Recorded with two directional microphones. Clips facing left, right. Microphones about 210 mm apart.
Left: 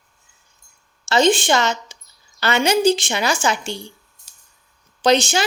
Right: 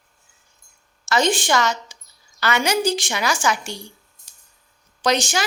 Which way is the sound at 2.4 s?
25° left (ahead or behind).